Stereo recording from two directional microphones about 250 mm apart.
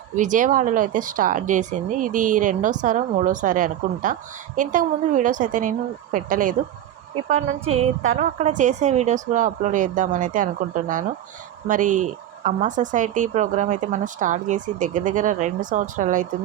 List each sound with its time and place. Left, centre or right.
0.2 s speech: right
8.2 s speech: right